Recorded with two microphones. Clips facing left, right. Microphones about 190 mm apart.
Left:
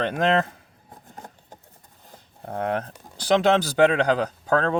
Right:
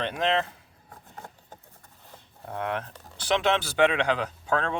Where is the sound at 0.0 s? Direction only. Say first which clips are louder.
Left 5 dB; 45° left (ahead or behind).